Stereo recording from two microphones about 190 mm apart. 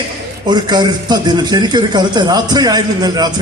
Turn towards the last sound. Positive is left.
turn(degrees=-20)  # may be behind; listen again after turning